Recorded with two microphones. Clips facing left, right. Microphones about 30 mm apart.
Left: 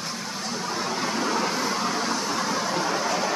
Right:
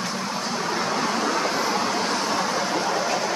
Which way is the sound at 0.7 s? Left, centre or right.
Right.